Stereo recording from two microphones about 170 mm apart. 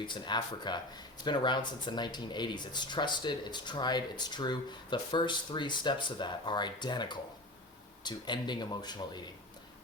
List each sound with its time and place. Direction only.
0.0 s speech: 25° left (ahead or behind)